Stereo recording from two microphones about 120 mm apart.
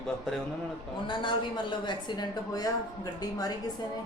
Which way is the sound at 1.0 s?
40° left (ahead or behind).